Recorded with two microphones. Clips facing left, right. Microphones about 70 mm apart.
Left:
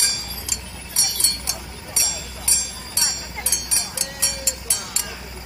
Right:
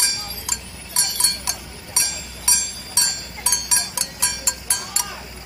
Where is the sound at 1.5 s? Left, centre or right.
Right.